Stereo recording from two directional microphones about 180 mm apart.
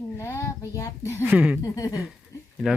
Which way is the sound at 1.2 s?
5° right (ahead or behind).